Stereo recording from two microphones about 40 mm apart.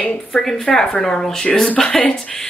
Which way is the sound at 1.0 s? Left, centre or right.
Centre.